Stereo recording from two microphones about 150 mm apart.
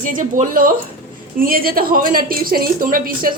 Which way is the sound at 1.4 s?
80° right.